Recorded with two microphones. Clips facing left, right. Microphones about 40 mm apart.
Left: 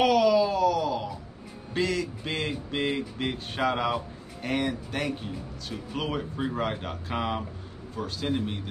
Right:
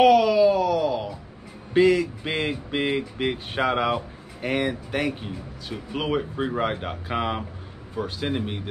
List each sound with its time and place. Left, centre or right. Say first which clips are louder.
0.0 s wail: right 5 dB; centre
1.7 s speech: right 9 dB; centre